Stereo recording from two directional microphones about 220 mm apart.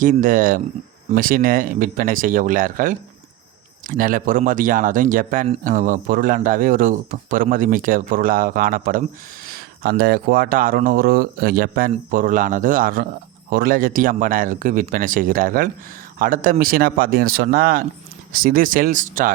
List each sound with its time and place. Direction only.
0.0 s speech: 35° right (ahead or behind)